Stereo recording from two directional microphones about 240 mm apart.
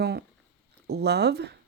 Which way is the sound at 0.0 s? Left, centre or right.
Right.